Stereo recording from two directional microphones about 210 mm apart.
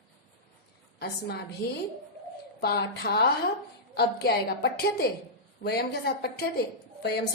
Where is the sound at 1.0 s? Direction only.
50° left (ahead or behind).